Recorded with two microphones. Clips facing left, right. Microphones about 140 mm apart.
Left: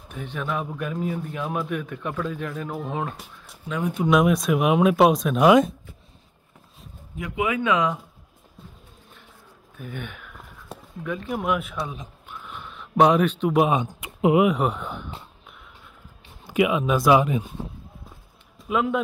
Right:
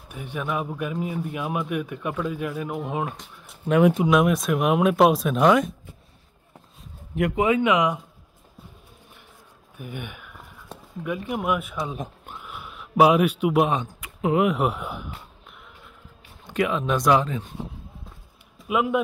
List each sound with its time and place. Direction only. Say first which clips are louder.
0.1 s a man's voice: even; 10° right (ahead or behind)
3.6 s speech: right 10 dB; 70° right (ahead or behind)
4.1 s speech: left 1 dB; centre (ahead or behind)
7.3 s speech: right 3 dB; 30° right (ahead or behind)
7.6 s a man's voice: right 2 dB; 15° right (ahead or behind)
9.8 s speech: even; 10° right (ahead or behind)
10.7 s a sound: left 2 dB; 5° left (ahead or behind)
11.1 s speech: even; 10° right (ahead or behind)
12.4 s a sound: left 1 dB; 5° right (ahead or behind)
16.4 s speech: left 3 dB; 10° left (ahead or behind)
18.7 s a man's voice: even; 10° right (ahead or behind)